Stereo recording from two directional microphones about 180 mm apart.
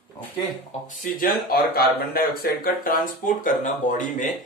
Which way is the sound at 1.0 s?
55° left (ahead or behind).